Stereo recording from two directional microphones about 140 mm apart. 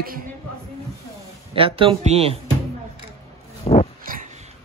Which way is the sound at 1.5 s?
40° right (ahead or behind).